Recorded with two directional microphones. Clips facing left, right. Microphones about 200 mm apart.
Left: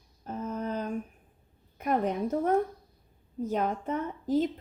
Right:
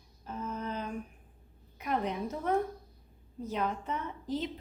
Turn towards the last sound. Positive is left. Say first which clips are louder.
# left 8 dB
turn(degrees=45)  # may be behind; listen again after turning